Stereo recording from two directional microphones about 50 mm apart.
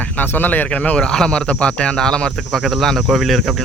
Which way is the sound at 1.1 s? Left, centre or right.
Centre.